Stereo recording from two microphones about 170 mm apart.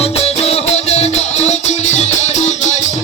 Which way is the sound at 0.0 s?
35° left (ahead or behind).